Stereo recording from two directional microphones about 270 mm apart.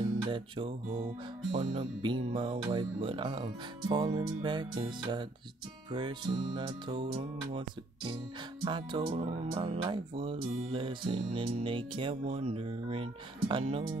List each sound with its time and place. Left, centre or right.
0.2 s music: centre
8.6 s speech: centre